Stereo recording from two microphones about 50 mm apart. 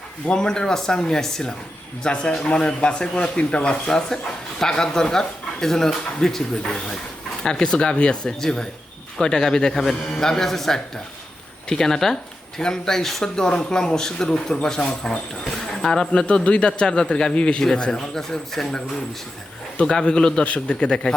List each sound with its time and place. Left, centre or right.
0.3 s speech: centre
19.8 s speech: centre